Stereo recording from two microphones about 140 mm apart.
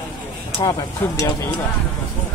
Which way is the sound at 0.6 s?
30° left (ahead or behind).